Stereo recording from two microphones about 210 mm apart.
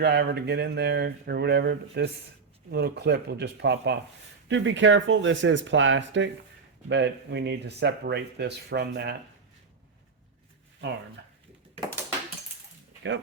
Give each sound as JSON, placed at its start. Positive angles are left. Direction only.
{"t": 0.0, "sound": "speech", "side_deg": -50}